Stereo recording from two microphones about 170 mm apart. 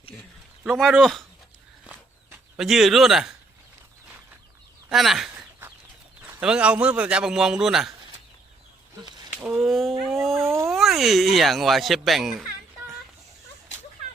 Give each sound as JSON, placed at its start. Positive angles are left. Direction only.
{"t": 0.6, "sound": "speech", "side_deg": -5}
{"t": 1.8, "sound": "a sound", "side_deg": -5}
{"t": 4.9, "sound": "a sound", "side_deg": 0}
{"t": 6.2, "sound": "speech", "side_deg": -5}
{"t": 9.4, "sound": "speech", "side_deg": 0}
{"t": 10.1, "sound": "dog", "side_deg": 0}
{"t": 10.7, "sound": "speech", "side_deg": 0}